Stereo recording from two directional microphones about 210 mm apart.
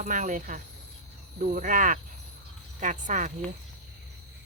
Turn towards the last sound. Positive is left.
turn(degrees=-35)  # may be behind; listen again after turning